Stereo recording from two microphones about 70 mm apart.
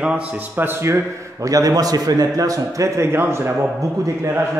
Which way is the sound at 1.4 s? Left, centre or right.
Right.